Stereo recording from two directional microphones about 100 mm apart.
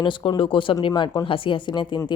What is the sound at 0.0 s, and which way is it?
A woman's voice, 50° left (ahead or behind).